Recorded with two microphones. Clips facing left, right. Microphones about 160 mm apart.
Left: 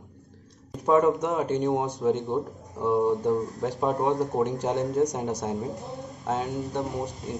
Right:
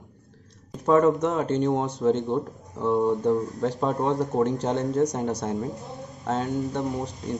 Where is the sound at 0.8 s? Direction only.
15° left (ahead or behind).